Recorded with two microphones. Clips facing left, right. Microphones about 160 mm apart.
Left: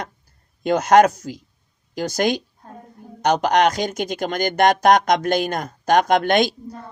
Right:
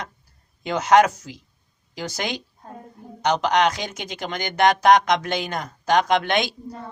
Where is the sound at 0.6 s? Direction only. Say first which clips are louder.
Left 3 dB; 45° left (ahead or behind).